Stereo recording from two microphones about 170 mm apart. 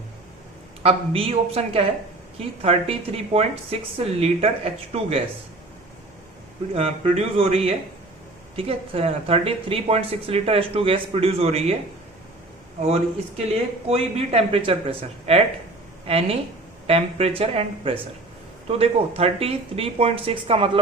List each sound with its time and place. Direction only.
0.8 s speech: 35° right (ahead or behind)
6.7 s speech: 35° right (ahead or behind)
13.8 s speech: 35° right (ahead or behind)